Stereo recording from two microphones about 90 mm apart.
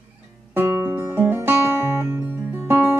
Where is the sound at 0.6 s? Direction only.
30° right (ahead or behind).